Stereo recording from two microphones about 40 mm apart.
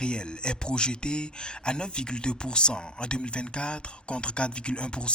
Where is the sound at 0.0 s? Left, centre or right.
Left.